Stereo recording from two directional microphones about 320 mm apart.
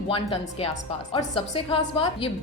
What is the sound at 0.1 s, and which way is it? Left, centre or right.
A woman's voice, centre.